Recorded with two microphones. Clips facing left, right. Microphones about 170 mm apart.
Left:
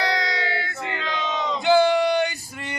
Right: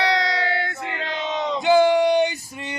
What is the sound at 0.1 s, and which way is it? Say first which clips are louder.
Crowd: right 3 dB; 65° right (ahead or behind).